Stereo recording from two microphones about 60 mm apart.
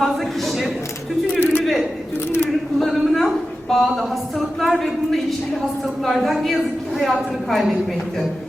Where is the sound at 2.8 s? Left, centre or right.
Centre.